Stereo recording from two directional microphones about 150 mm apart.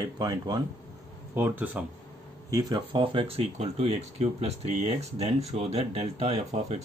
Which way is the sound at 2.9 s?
35° right (ahead or behind).